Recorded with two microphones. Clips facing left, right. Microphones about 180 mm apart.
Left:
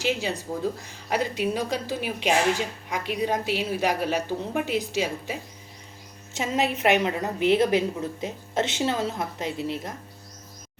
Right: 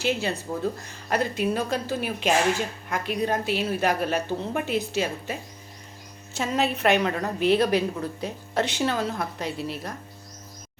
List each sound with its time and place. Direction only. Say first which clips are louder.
0.0 s a woman's voice: right 1 dB; 15° left (ahead or behind)